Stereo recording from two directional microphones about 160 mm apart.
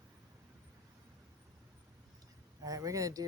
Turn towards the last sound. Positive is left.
turn(degrees=-20)  # may be behind; listen again after turning